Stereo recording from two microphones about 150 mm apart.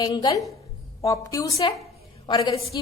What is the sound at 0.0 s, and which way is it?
A woman's voice, 25° left (ahead or behind).